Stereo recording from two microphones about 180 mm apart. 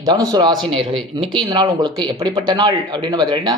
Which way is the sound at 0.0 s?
20° right (ahead or behind).